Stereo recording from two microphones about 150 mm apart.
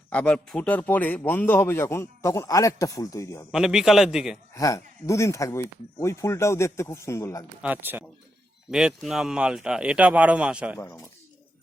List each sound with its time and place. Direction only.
0.1 s a man's voice: 5° left (ahead or behind)
3.5 s speech: 5° right (ahead or behind)
4.5 s speech: 20° left (ahead or behind)
7.6 s speech: 10° right (ahead or behind)
10.8 s speech: 20° left (ahead or behind)